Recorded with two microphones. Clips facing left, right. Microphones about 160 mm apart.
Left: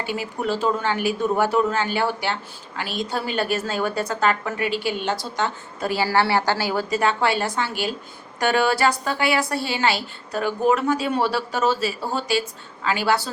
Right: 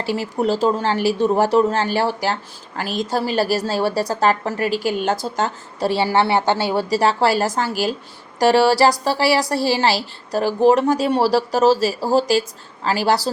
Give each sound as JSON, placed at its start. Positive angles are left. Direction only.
{"t": 0.0, "sound": "speech", "side_deg": -35}
{"t": 5.8, "sound": "speech", "side_deg": -25}